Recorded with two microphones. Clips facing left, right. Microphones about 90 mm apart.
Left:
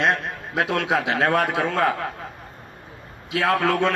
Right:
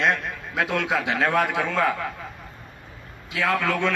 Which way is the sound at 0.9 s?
60° left (ahead or behind).